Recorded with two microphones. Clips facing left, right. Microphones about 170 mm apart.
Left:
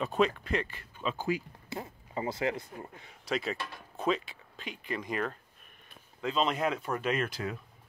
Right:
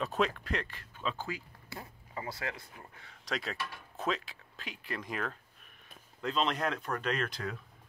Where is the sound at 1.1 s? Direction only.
15° left (ahead or behind).